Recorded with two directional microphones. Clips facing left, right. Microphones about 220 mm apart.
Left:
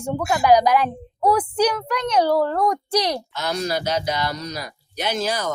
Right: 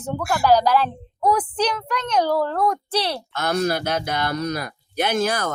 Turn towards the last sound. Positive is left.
turn(degrees=-55)  # may be behind; listen again after turning